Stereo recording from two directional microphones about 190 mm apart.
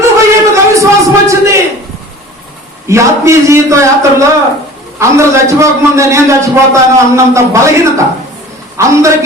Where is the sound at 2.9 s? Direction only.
15° right (ahead or behind).